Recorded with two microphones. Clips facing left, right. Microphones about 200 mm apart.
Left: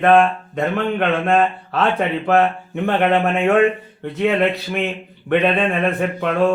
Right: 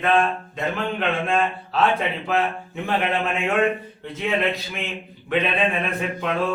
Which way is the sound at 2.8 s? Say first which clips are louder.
Left 7 dB; 60° left (ahead or behind).